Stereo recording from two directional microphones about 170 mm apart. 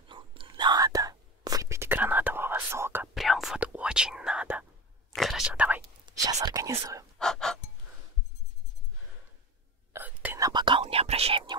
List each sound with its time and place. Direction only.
0.1 s whispering: 30° right (ahead or behind); by 3.1 s 15° right (ahead or behind)
3.2 s whispering: centre (ahead or behind)
6.1 s whispering: 25° right (ahead or behind)
7.2 s gasp: 5° left (ahead or behind)
9.9 s whispering: 10° right (ahead or behind)
10.5 s whispering: 30° right (ahead or behind)